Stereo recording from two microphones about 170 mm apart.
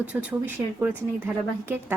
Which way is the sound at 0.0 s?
10° right (ahead or behind).